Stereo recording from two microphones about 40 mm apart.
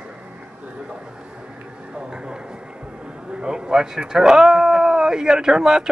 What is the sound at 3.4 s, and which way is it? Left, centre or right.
Speech, centre.